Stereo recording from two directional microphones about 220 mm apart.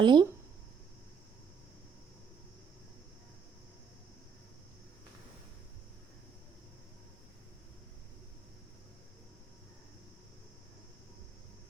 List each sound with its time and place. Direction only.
0.0 s speech: 20° right (ahead or behind)